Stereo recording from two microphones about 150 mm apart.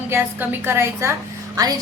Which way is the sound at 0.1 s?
15° right (ahead or behind).